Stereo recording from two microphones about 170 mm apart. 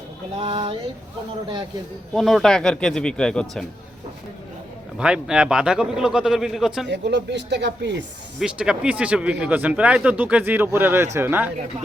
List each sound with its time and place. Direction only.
0.3 s speech: 30° right (ahead or behind)
2.1 s a man's voice: centre (ahead or behind)
4.9 s a man's voice: 5° right (ahead or behind)
6.8 s speech: 90° right
8.4 s speech: 5° right (ahead or behind)